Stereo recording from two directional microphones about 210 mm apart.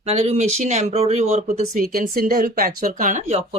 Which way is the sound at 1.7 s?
45° right (ahead or behind).